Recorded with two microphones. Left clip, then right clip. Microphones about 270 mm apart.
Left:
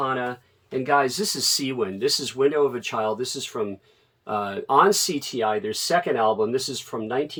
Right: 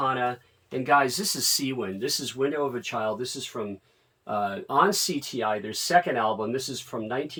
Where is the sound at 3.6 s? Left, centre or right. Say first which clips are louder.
Left 6 dB; left.